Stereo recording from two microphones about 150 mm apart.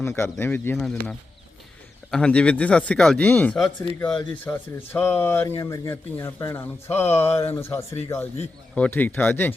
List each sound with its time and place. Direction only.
0.0 s speech: 15° left (ahead or behind)
0.8 s speech: 5° left (ahead or behind)